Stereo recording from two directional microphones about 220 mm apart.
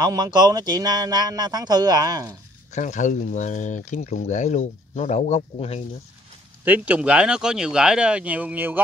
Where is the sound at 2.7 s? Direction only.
35° left (ahead or behind).